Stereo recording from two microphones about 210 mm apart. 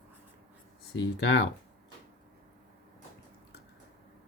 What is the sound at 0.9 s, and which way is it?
Speech, 55° left (ahead or behind).